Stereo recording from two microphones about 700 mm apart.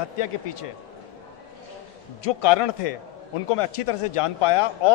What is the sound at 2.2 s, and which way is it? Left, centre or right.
A man's voice, left.